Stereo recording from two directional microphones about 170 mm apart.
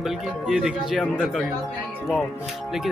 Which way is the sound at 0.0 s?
5° right (ahead or behind).